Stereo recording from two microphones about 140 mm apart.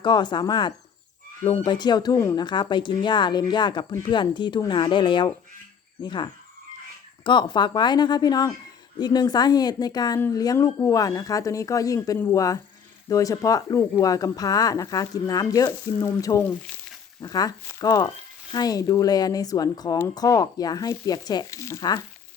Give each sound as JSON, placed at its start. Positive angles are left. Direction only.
{"t": 0.0, "sound": "speech", "side_deg": 30}